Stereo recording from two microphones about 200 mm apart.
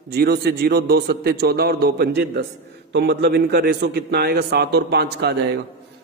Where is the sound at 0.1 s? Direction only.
50° right (ahead or behind).